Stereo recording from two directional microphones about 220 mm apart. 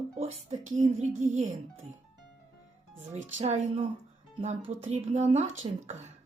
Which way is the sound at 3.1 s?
30° right (ahead or behind).